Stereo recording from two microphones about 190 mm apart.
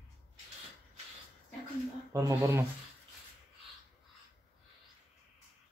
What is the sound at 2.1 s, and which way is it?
Speech, 15° right (ahead or behind).